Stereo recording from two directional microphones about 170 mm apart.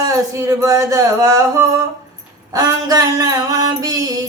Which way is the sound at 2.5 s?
20° right (ahead or behind).